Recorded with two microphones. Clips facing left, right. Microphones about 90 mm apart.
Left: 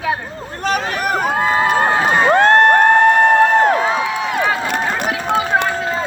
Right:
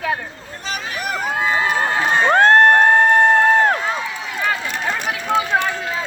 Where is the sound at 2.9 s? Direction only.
65° left (ahead or behind).